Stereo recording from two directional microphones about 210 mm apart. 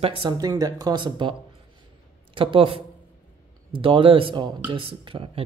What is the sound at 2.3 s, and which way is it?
Speech, 25° right (ahead or behind).